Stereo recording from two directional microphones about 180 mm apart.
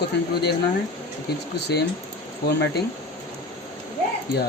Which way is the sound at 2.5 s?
70° left (ahead or behind).